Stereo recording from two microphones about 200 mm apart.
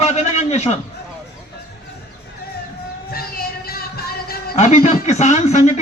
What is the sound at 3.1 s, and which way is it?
Music, 50° left (ahead or behind).